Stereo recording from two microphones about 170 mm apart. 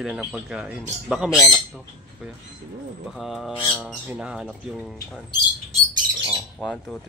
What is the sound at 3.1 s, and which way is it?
Speech, centre (ahead or behind).